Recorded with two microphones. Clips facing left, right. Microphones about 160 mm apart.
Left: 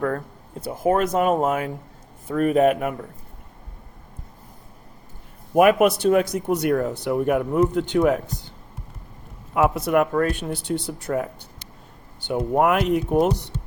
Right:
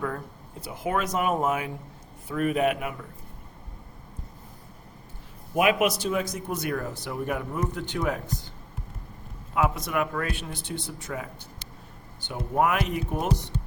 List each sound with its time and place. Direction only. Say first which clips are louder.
0.6 s speech: left 8 dB; 45° left (ahead or behind)
1.2 s speech: left 6 dB; 30° left (ahead or behind)
1.5 s speech: left 4 dB; 45° left (ahead or behind)
5.5 s speech: left 7 dB; 50° left (ahead or behind)
9.6 s speech: left 7 dB; 55° left (ahead or behind)
12.3 s speech: left 6 dB; 55° left (ahead or behind)